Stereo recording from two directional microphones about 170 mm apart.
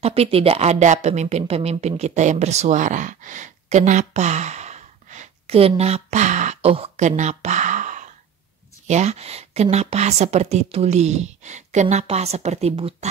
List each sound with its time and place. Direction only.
0.0 s a woman's voice: 35° right (ahead or behind)